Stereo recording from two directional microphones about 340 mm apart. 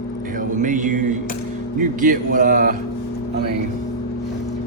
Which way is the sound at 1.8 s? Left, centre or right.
Right.